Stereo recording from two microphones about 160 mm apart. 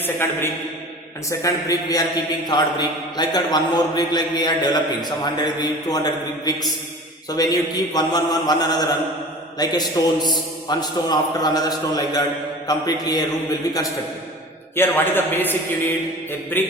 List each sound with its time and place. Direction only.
0.0 s a man's voice: 15° left (ahead or behind)
14.8 s a man's voice: 10° left (ahead or behind)